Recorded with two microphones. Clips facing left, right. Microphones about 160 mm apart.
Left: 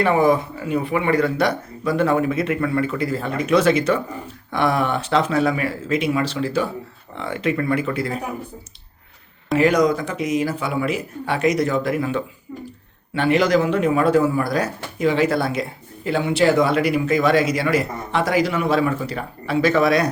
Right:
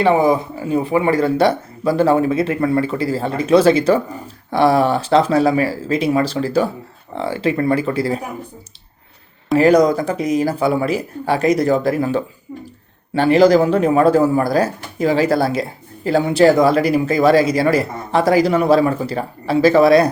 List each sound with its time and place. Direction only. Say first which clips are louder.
0.0 s speech: right 3 dB; 25° right (ahead or behind)
9.6 s speech: right 5 dB; 35° right (ahead or behind)